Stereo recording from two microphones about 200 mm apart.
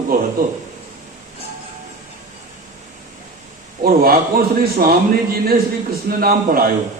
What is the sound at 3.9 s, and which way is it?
Speech, 45° right (ahead or behind).